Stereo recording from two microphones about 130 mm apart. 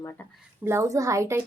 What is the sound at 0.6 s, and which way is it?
Speech, 20° right (ahead or behind).